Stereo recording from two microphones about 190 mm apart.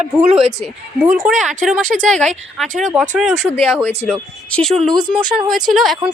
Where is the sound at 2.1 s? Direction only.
5° left (ahead or behind).